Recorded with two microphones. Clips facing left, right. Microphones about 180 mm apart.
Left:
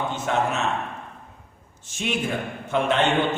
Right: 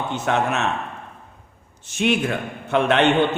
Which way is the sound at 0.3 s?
70° right (ahead or behind).